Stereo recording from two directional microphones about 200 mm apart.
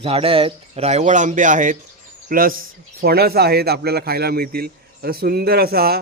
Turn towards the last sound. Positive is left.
turn(degrees=-50)  # may be behind; listen again after turning